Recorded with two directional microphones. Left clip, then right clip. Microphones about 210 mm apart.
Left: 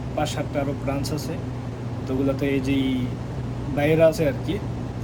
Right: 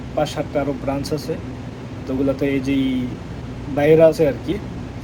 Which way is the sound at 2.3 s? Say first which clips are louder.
Right 3 dB; 10° left (ahead or behind).